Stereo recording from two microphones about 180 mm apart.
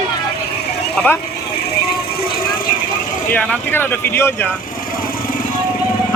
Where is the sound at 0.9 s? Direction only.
10° left (ahead or behind).